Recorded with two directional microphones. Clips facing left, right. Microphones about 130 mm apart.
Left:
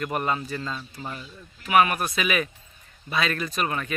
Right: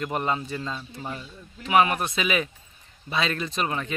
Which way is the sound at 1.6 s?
25° right (ahead or behind).